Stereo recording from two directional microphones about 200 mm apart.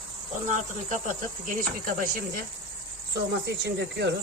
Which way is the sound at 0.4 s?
40° right (ahead or behind).